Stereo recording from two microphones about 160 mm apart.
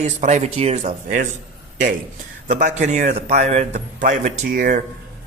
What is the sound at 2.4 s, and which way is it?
Speech, 50° right (ahead or behind).